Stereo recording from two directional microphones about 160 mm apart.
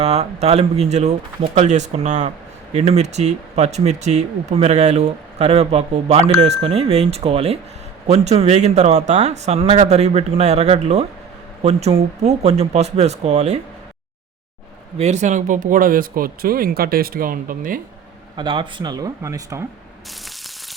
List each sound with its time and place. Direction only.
0.0 s speech: 40° right (ahead or behind)
14.9 s speech: 45° right (ahead or behind)
18.3 s speech: 30° right (ahead or behind)